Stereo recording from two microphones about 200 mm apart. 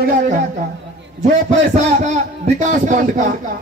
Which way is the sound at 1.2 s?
35° right (ahead or behind).